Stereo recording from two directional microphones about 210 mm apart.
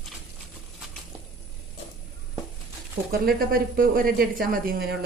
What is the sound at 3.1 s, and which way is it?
Speech, 45° right (ahead or behind).